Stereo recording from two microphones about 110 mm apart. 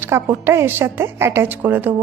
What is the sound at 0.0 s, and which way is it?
A woman's voice, 20° right (ahead or behind).